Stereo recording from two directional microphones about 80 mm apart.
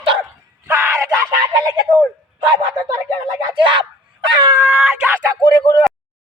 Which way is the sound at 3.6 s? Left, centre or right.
Right.